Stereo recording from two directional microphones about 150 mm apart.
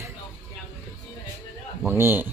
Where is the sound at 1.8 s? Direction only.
15° right (ahead or behind).